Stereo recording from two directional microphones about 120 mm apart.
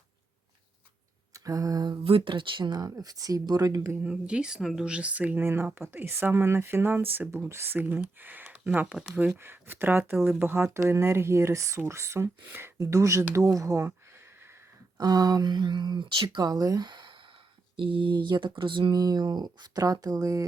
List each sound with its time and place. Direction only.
1.3 s a sound: 30° right (ahead or behind)
2.0 s speech: 45° right (ahead or behind); by 3.9 s 30° right (ahead or behind)
3.9 s speech: 10° right (ahead or behind); by 13.9 s 25° right (ahead or behind)
14.9 s speech: 35° right (ahead or behind)